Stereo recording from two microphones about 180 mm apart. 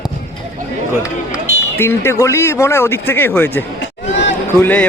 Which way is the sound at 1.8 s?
15° left (ahead or behind).